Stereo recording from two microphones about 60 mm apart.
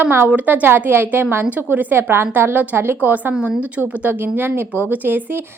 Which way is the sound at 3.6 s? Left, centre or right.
Right.